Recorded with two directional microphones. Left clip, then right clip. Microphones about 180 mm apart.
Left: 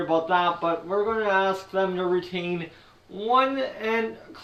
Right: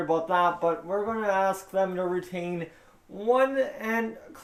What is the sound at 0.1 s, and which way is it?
Speech, 50° right (ahead or behind).